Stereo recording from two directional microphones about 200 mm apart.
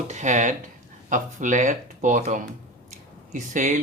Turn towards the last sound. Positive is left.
turn(degrees=-40)  # may be behind; listen again after turning